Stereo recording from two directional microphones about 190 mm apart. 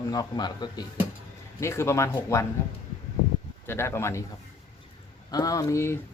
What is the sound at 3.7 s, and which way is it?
Speech, 15° left (ahead or behind).